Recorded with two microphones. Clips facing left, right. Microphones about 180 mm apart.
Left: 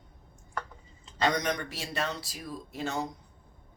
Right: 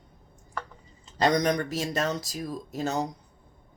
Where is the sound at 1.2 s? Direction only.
35° right (ahead or behind).